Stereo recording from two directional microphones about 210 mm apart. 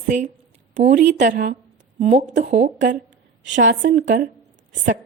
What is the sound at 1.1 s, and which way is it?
A woman's voice, 35° right (ahead or behind).